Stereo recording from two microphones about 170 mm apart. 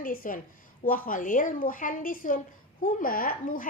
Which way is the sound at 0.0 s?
55° left (ahead or behind).